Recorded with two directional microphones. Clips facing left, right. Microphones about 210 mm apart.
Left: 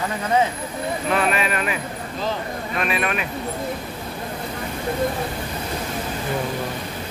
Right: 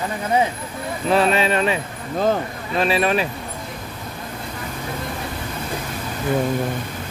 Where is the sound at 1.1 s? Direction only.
30° right (ahead or behind).